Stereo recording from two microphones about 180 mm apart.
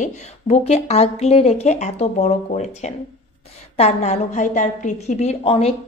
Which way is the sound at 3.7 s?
35° left (ahead or behind).